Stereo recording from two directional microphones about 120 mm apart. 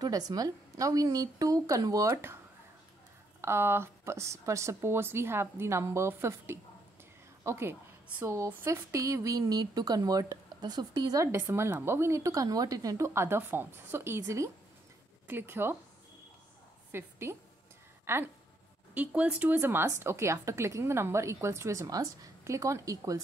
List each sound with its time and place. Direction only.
0.0 s speech: 35° right (ahead or behind)
16.9 s a woman's voice: 20° right (ahead or behind)